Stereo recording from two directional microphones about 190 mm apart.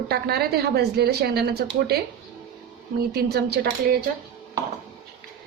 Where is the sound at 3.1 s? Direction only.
55° right (ahead or behind).